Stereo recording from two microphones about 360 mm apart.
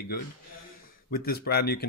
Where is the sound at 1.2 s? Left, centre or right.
Left.